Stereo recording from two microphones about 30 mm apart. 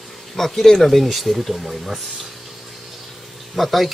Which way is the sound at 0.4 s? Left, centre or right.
Centre.